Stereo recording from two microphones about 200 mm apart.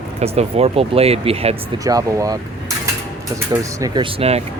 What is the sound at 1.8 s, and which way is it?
Speech, 15° right (ahead or behind).